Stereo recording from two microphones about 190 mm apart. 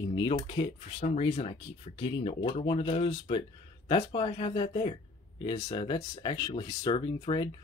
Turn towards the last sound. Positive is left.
turn(degrees=25)  # may be behind; listen again after turning